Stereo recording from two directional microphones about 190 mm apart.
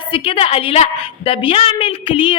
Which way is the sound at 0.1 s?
30° left (ahead or behind).